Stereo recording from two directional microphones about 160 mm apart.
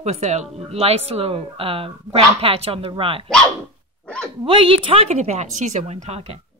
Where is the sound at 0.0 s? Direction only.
45° right (ahead or behind).